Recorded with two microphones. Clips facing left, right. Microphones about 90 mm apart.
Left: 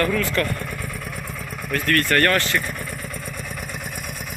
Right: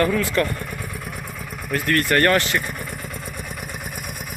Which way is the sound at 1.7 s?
20° right (ahead or behind).